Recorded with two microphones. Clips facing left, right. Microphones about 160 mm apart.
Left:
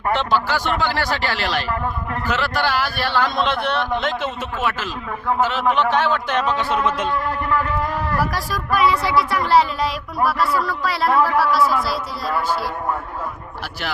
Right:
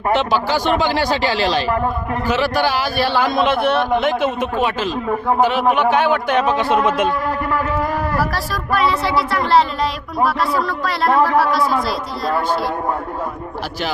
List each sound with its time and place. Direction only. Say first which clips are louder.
0.1 s a man's voice: right 3 dB; 15° right (ahead or behind)
8.2 s speech: right 2 dB; 15° left (ahead or behind)